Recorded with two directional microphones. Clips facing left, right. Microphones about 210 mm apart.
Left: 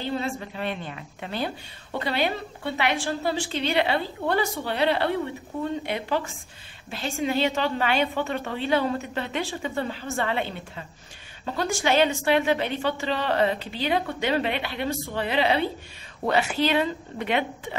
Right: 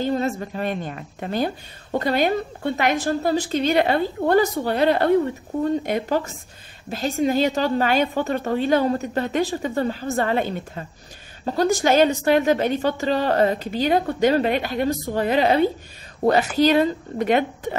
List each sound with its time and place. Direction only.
0.0 s a woman's voice: 45° right (ahead or behind)